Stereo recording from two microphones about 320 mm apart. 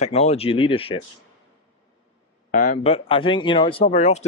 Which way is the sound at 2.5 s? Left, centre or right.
Left.